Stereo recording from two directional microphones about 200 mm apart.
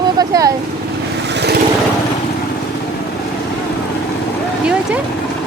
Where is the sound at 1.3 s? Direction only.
55° right (ahead or behind).